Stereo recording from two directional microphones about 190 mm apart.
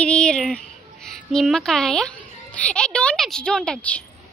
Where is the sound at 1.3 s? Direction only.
Centre (ahead or behind).